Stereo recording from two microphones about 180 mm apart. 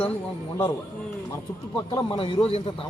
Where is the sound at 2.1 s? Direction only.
30° left (ahead or behind).